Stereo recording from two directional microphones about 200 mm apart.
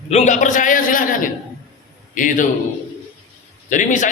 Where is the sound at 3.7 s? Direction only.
40° left (ahead or behind).